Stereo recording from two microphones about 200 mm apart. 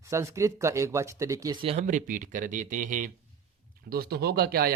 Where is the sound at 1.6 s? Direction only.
35° right (ahead or behind).